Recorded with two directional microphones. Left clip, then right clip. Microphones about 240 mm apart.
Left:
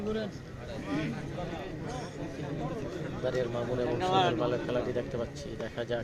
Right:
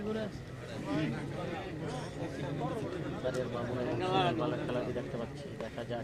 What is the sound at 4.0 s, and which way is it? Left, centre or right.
A man's voice, left.